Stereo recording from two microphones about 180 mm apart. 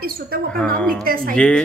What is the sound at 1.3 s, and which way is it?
Speech, 5° left (ahead or behind).